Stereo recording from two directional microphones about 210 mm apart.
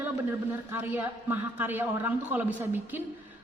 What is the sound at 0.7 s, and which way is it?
A man's voice, 10° right (ahead or behind).